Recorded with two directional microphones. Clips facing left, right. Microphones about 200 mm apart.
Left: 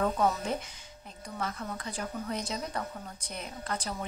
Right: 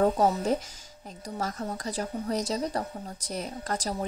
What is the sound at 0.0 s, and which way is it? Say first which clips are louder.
A woman's voice: right 5 dB; 40° right (ahead or behind).